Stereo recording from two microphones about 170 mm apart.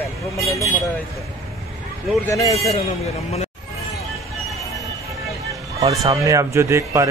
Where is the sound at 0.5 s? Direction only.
20° left (ahead or behind).